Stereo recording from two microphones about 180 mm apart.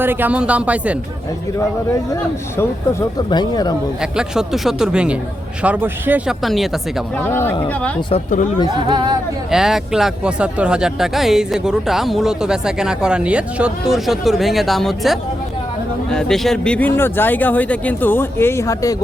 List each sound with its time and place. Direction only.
0.0 s speech: 10° right (ahead or behind)
2.6 s speech: 20° left (ahead or behind)
4.0 s speech: 5° right (ahead or behind)
7.2 s speech: 15° left (ahead or behind)
8.9 s speech: 25° right (ahead or behind)
9.5 s speech: 5° right (ahead or behind); by 18.9 s 20° left (ahead or behind)